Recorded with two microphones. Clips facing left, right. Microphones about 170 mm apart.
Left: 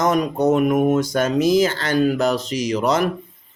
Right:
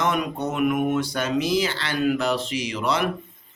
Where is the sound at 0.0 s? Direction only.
40° left (ahead or behind).